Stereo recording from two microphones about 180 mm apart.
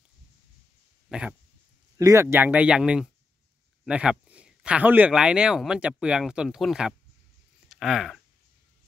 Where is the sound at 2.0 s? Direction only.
15° right (ahead or behind).